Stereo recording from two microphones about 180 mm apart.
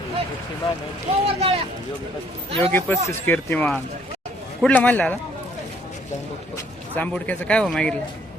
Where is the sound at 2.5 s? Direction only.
35° right (ahead or behind).